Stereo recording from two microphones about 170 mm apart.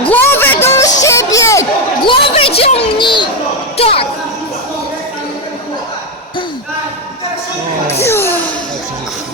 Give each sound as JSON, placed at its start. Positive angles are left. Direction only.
{"t": 0.1, "sound": "music", "side_deg": 10}
{"t": 2.0, "sound": "a sound", "side_deg": 30}
{"t": 3.8, "sound": "music", "side_deg": 35}
{"t": 8.0, "sound": "music", "side_deg": 15}